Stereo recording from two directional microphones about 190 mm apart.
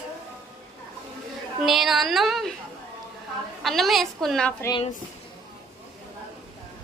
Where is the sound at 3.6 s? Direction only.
Centre (ahead or behind).